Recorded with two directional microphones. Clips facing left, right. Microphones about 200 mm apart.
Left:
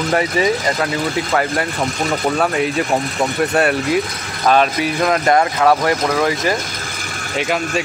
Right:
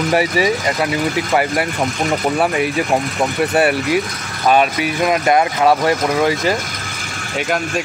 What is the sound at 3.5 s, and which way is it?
Speech, 5° right (ahead or behind).